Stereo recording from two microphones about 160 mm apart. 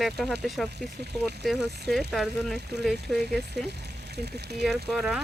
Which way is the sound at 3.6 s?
90° right.